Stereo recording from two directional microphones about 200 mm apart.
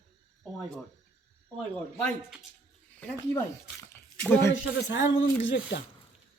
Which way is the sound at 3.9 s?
10° left (ahead or behind).